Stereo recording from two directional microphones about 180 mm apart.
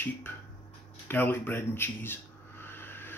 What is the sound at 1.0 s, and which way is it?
Speech, 10° left (ahead or behind).